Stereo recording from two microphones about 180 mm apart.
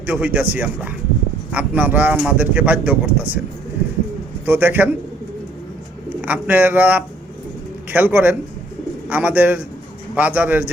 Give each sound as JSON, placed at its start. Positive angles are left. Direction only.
{"t": 0.0, "sound": "speech", "side_deg": -10}
{"t": 4.4, "sound": "speech", "side_deg": -10}
{"t": 6.2, "sound": "speech", "side_deg": -10}